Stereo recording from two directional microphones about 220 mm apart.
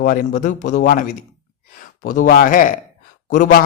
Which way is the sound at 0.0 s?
35° left (ahead or behind).